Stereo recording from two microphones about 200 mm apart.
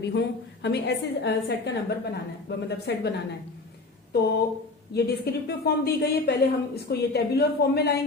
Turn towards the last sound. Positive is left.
turn(degrees=55)  # may be behind; listen again after turning